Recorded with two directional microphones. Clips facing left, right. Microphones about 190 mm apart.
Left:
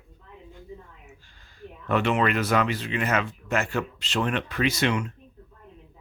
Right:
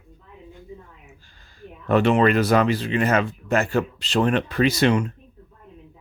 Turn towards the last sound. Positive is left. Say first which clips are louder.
# right 6 dB
turn(degrees=-35)  # may be behind; listen again after turning